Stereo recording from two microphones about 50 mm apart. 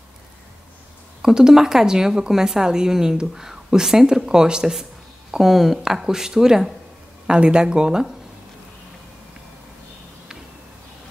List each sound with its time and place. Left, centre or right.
1.2 s speech: centre